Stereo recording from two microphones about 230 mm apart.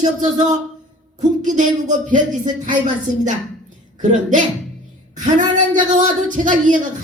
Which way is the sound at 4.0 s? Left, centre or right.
Right.